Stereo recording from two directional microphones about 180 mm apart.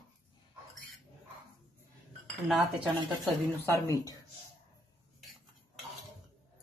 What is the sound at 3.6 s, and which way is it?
Speech, 20° left (ahead or behind).